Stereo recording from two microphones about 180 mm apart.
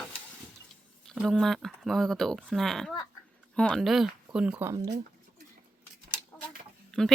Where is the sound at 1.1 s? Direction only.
Centre (ahead or behind).